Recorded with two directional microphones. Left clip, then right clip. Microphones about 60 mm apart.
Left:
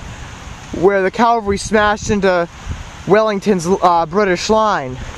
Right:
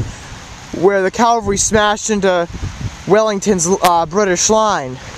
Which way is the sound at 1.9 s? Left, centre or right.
Centre.